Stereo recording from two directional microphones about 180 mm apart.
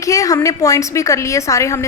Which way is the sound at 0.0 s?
20° left (ahead or behind).